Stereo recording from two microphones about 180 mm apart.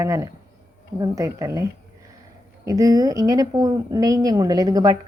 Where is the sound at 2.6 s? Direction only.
20° right (ahead or behind).